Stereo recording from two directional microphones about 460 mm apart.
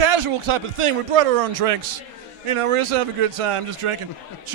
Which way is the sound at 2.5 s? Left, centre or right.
Right.